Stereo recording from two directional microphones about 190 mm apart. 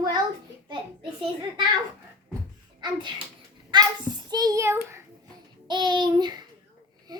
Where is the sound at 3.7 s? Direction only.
20° right (ahead or behind).